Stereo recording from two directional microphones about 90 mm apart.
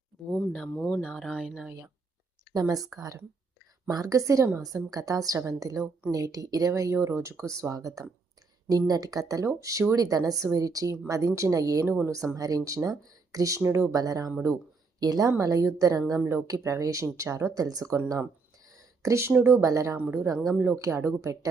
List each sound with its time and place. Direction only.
0.7 s speech: 15° left (ahead or behind)
1.0 s speech: centre (ahead or behind)
2.5 s speech: 45° right (ahead or behind)
11.9 s speech: 25° right (ahead or behind)
12.1 s speech: 40° right (ahead or behind)
13.6 s speech: 25° right (ahead or behind)
13.9 s speech: 40° right (ahead or behind)
19.0 s speech: 30° right (ahead or behind)
19.3 s speech: 20° right (ahead or behind)
19.5 s speech: 35° right (ahead or behind)
20.0 s speech: 20° right (ahead or behind)
20.2 s speech: 40° right (ahead or behind)